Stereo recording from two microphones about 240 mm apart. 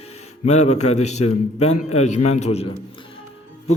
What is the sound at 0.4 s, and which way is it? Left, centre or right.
A man's voice, left.